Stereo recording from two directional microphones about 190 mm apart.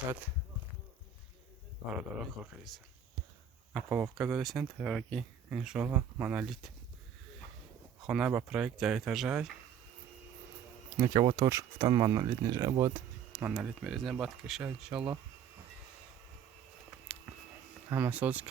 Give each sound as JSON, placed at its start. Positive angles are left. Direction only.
{"t": 1.9, "sound": "speech", "side_deg": -5}
{"t": 8.0, "sound": "speech", "side_deg": -5}
{"t": 10.9, "sound": "speech", "side_deg": -15}
{"t": 13.5, "sound": "speech", "side_deg": 0}
{"t": 17.9, "sound": "speech", "side_deg": -10}